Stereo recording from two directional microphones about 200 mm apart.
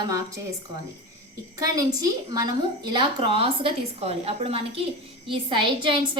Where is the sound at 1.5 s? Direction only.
15° right (ahead or behind).